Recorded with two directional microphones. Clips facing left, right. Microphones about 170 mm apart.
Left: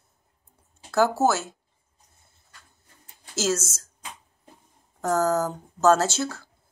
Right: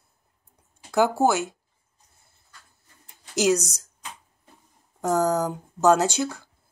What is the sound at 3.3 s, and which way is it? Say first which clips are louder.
Speech: right 5 dB; 15° right (ahead or behind).